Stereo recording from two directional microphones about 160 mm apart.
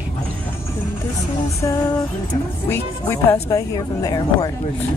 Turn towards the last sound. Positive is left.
turn(degrees=25)  # may be behind; listen again after turning